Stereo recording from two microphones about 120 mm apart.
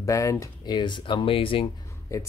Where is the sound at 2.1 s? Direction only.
25° left (ahead or behind).